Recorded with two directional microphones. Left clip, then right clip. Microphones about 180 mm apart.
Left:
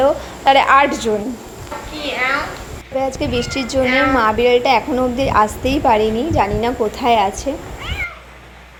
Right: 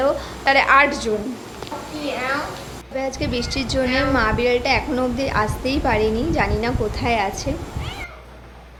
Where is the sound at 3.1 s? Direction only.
20° left (ahead or behind).